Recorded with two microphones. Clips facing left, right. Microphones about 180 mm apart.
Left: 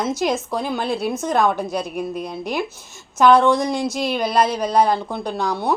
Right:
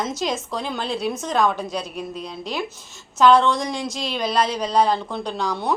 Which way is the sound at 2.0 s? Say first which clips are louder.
Left 5 dB; 60° left (ahead or behind).